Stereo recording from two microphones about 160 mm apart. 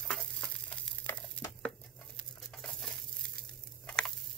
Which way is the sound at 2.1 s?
5° left (ahead or behind).